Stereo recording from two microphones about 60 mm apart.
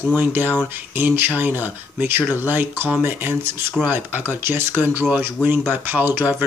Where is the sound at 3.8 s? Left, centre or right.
Right.